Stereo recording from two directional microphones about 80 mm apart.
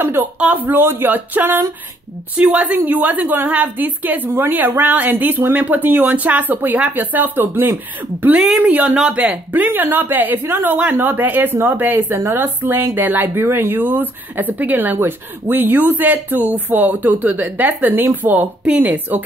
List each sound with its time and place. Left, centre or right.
0.0 s a woman's voice: right
8.2 s speech: centre
8.9 s speech: centre
9.2 s a woman's voice: right